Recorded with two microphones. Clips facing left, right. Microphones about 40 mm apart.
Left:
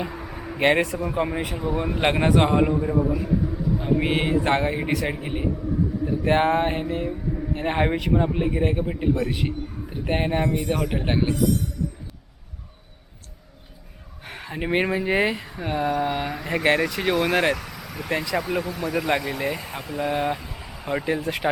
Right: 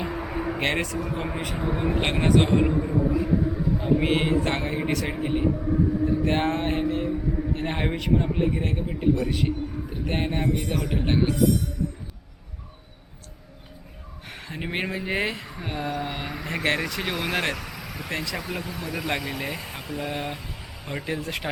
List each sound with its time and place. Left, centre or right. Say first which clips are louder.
0.1 s a sound: right 5 dB; centre
0.6 s speech: left 9 dB; centre
1.6 s speech: left 1 dB; centre
2.0 s speech: left 3 dB; centre
3.8 s speech: even; centre
5.5 s a sound: right 2 dB; centre
6.2 s speech: left 4 dB; centre
14.3 s speech: left 6 dB; centre